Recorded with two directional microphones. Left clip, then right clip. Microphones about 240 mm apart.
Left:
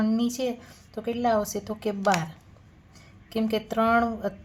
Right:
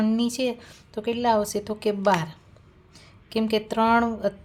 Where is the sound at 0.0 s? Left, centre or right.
Centre.